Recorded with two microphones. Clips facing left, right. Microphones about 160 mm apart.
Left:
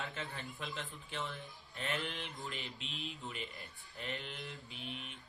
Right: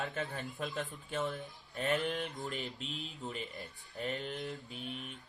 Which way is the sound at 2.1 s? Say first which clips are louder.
Right 7 dB; 45° right (ahead or behind).